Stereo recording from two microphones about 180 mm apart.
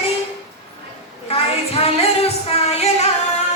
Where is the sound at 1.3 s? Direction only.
35° left (ahead or behind).